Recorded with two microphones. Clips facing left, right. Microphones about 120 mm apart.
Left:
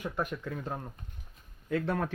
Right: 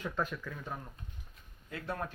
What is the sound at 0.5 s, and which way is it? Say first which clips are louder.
Speech: left 5 dB; 35° left (ahead or behind).